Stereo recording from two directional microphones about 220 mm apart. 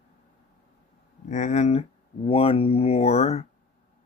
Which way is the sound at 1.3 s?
35° left (ahead or behind).